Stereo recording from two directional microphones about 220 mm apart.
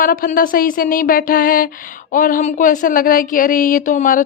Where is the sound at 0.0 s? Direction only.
40° left (ahead or behind).